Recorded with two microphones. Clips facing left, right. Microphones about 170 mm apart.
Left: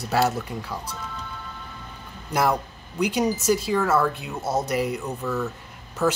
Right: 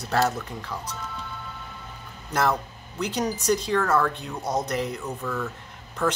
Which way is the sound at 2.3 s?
10° left (ahead or behind).